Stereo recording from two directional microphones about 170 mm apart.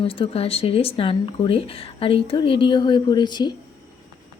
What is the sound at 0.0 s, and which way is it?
Speech, 35° left (ahead or behind).